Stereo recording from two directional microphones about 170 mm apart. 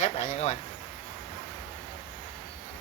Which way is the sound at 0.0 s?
45° left (ahead or behind).